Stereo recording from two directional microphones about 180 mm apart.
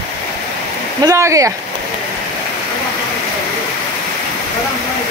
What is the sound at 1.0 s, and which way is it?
Speech, 15° right (ahead or behind).